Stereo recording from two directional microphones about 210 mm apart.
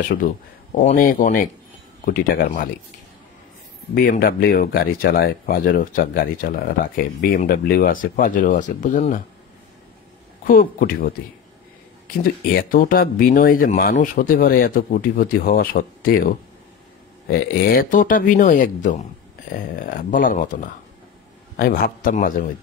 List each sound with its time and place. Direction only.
0.7 s speech: 40° left (ahead or behind)
3.9 s speech: 45° left (ahead or behind)
10.4 s speech: 40° left (ahead or behind)
12.2 s speech: 45° left (ahead or behind)
17.3 s speech: 45° left (ahead or behind)